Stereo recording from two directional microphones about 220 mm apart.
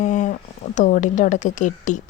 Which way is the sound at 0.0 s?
35° left (ahead or behind).